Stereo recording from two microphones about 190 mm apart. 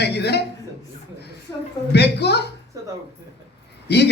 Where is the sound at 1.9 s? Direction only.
60° left (ahead or behind).